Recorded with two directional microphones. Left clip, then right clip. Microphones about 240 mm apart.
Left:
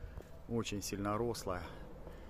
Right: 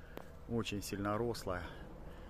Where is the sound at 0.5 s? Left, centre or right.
Centre.